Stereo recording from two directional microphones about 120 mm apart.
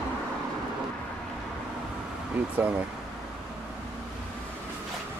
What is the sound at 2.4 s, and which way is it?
Speech, 15° right (ahead or behind).